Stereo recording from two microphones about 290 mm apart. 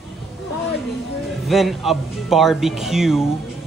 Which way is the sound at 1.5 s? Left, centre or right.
Centre.